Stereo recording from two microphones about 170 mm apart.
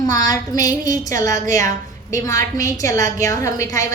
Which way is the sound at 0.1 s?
20° left (ahead or behind).